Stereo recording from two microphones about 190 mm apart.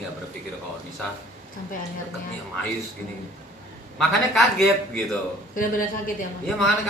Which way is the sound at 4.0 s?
Centre (ahead or behind).